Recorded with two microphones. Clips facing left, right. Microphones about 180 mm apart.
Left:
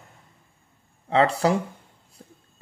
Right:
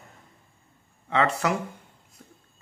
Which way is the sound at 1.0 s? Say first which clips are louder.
Left 4 dB; 35° left (ahead or behind).